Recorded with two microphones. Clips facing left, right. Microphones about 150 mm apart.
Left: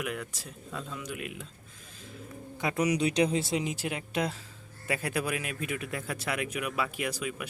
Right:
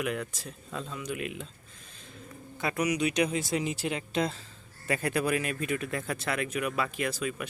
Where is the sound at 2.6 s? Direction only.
20° left (ahead or behind).